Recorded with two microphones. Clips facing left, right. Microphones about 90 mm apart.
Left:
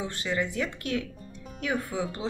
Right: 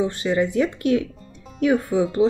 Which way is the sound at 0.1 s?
20° right (ahead or behind).